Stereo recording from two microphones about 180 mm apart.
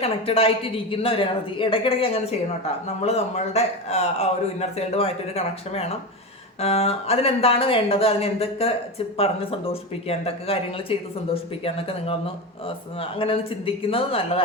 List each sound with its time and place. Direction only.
0.0 s a man's voice: 30° left (ahead or behind)